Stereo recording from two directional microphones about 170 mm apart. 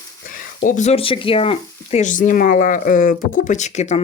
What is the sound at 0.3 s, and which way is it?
Speech, 50° left (ahead or behind).